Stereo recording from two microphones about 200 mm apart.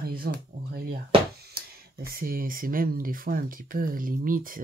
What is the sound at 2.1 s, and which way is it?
Speech, 45° right (ahead or behind).